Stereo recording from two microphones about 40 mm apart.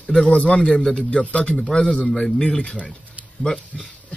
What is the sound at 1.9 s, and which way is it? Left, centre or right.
Speech, centre.